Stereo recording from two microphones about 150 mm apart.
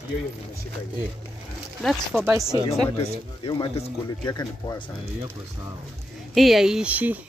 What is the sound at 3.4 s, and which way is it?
Speech, 40° left (ahead or behind).